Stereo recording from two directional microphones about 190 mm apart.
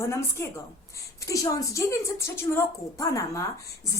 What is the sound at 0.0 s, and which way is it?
A woman's voice, 15° left (ahead or behind).